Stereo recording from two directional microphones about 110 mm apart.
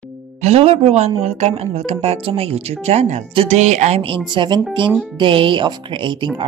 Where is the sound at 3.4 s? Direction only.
90° right.